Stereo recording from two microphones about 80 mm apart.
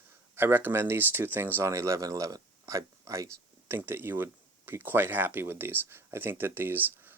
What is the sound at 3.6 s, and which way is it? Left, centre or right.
Speech, right.